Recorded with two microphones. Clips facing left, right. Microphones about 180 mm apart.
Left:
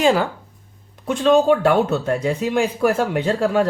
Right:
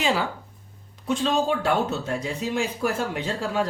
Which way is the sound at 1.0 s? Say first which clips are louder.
Left 8 dB; 60° left (ahead or behind).